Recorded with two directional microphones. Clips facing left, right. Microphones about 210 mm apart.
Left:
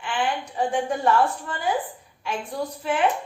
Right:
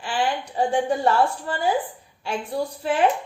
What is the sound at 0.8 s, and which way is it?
A woman's voice, 30° right (ahead or behind).